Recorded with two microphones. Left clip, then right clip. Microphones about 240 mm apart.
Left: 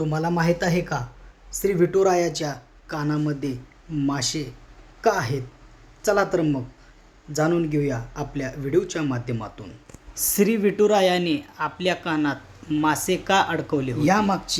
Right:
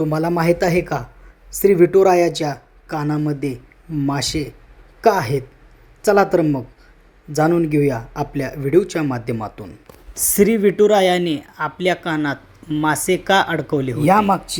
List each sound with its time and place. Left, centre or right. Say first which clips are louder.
0.0 s a woman's voice: right 5 dB; centre